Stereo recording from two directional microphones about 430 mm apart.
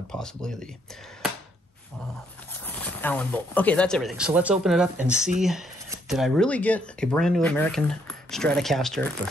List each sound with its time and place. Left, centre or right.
0.1 s speech: centre
2.6 s speech: centre